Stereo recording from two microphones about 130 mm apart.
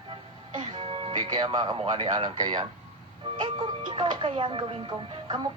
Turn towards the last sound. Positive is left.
turn(degrees=-40)  # may be behind; listen again after turning